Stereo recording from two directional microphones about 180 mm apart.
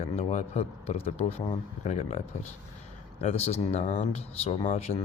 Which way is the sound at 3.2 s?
35° left (ahead or behind).